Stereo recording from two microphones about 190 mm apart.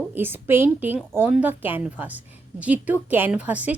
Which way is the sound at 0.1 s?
10° right (ahead or behind).